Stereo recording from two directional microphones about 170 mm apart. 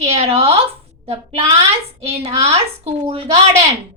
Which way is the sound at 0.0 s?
35° right (ahead or behind).